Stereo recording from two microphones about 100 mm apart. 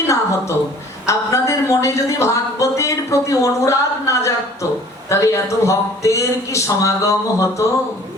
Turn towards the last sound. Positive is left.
turn(degrees=30)  # may be behind; listen again after turning